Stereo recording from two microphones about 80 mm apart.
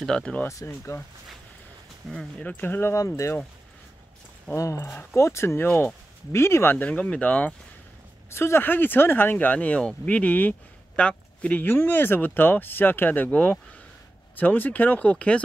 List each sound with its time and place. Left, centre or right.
0.0 s speech: centre
0.5 s speech: left
2.0 s speech: centre
2.4 s speech: left
4.6 s speech: left
5.7 s speech: centre
6.3 s speech: left; by 7.5 s centre
8.3 s speech: left; by 15.4 s centre